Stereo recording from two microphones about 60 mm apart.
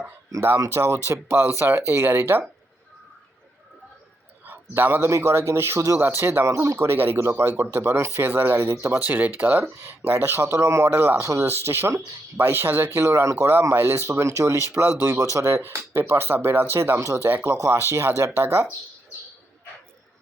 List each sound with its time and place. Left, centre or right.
0.6 s speech: right
4.4 s a sound: right
5.0 s speech: right
8.2 s speech: right
8.4 s speech: right
9.0 s speech: right
11.2 s speech: right
11.4 s speech: right
13.0 s speech: right
14.1 s speech: right
16.0 s speech: right